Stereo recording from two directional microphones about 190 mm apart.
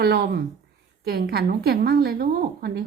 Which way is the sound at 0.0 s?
55° right (ahead or behind).